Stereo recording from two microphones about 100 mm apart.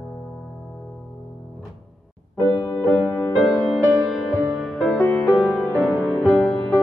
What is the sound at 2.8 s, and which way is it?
Music, 15° left (ahead or behind).